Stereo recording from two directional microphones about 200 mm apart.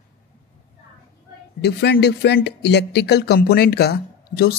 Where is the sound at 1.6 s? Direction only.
55° left (ahead or behind).